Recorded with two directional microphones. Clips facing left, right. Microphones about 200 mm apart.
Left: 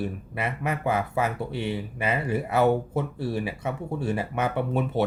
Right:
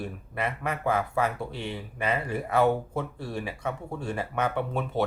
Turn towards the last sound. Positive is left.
turn(degrees=5)  # may be behind; listen again after turning